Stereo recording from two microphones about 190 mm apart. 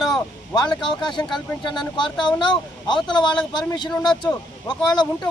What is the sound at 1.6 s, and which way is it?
Speech, 25° left (ahead or behind).